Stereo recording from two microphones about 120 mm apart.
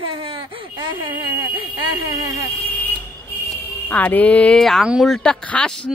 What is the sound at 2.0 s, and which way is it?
Speech, 30° right (ahead or behind).